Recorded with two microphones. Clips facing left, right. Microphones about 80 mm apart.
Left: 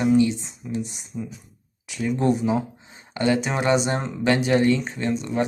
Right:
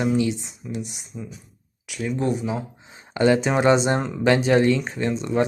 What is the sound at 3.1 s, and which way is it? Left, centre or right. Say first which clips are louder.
Speech: right 4 dB; right.